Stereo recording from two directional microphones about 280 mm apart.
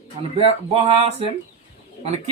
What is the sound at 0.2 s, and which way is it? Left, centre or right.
Speech, right.